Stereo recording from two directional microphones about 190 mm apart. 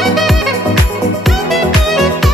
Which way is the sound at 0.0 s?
Centre (ahead or behind).